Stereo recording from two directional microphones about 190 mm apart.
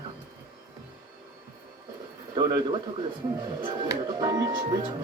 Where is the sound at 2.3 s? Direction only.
25° right (ahead or behind).